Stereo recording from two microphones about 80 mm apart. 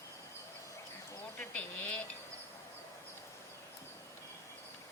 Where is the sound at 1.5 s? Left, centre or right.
Left.